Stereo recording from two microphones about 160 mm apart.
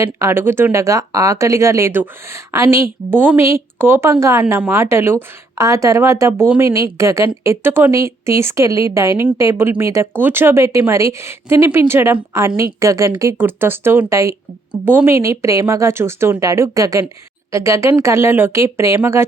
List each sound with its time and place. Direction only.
0.0 s a woman's voice: 15° right (ahead or behind)